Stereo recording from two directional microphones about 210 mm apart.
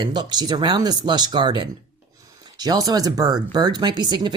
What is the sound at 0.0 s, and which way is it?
Speech, 20° right (ahead or behind).